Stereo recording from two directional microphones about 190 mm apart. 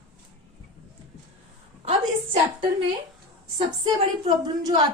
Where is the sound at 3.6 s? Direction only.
25° right (ahead or behind).